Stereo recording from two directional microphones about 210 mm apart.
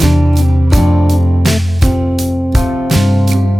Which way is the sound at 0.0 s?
Centre (ahead or behind).